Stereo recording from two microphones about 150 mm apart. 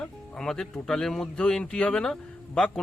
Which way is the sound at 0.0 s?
5° left (ahead or behind).